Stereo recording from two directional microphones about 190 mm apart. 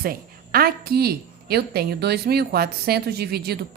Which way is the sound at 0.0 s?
50° right (ahead or behind).